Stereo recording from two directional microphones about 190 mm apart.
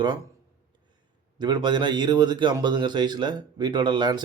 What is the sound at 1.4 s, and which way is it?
Speech, 25° right (ahead or behind).